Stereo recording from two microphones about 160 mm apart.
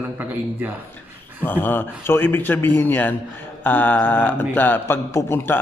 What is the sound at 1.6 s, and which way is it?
A man's voice, 10° left (ahead or behind).